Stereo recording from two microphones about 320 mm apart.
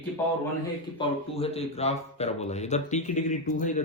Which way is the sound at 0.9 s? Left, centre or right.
Centre.